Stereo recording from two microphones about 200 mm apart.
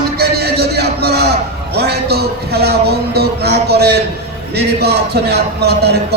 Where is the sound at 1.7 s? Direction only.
55° right (ahead or behind).